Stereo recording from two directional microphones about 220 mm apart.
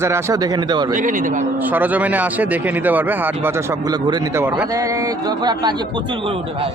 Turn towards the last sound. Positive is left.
turn(degrees=-25)  # may be behind; listen again after turning